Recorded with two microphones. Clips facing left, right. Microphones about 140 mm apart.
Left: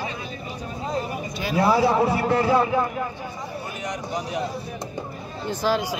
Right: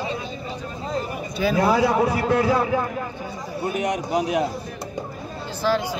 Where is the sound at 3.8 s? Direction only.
65° right (ahead or behind).